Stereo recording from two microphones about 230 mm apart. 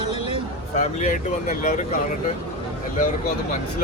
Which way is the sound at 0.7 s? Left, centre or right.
Left.